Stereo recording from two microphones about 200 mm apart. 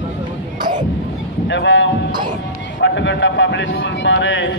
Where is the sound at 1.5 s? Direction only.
65° left (ahead or behind).